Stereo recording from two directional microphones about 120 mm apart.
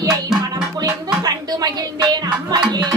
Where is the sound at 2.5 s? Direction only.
35° right (ahead or behind).